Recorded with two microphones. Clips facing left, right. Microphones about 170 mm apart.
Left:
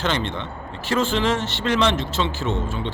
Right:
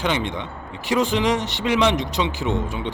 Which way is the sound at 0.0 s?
15° right (ahead or behind).